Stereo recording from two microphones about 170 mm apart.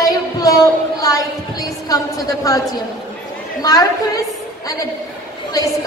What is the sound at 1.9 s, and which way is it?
Speech, 20° left (ahead or behind).